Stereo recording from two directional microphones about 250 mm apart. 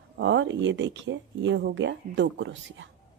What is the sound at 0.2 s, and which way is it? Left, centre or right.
Speech, right.